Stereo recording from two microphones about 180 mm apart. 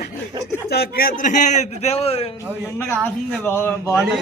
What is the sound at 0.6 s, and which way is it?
A man's voice, 60° left (ahead or behind).